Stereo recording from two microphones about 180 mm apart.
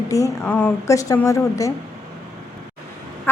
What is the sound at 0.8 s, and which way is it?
Speech, 15° left (ahead or behind).